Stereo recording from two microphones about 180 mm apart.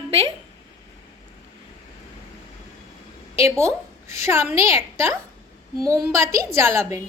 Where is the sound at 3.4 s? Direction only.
15° right (ahead or behind).